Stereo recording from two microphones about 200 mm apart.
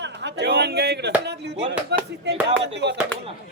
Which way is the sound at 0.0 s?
60° right (ahead or behind).